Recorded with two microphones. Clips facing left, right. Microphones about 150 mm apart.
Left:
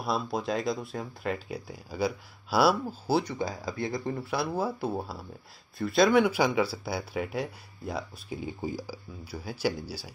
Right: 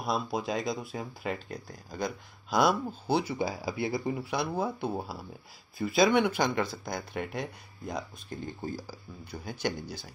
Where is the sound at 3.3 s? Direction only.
10° right (ahead or behind).